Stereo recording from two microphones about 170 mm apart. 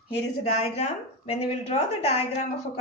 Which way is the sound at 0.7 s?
40° left (ahead or behind).